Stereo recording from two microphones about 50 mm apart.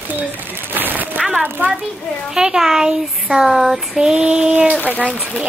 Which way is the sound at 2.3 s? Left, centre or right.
Centre.